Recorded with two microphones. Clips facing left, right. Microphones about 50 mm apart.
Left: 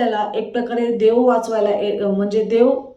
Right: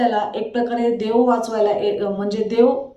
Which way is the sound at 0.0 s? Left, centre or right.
Left.